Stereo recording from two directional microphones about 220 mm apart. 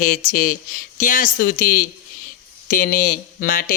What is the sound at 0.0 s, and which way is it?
Speech, 40° left (ahead or behind).